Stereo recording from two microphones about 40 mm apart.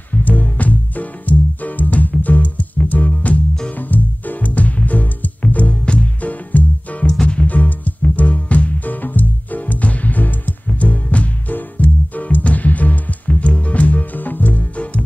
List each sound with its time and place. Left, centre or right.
0.1 s music: left
3.7 s music: left
4.5 s music: left
6.2 s music: left
7.1 s music: centre
7.4 s music: left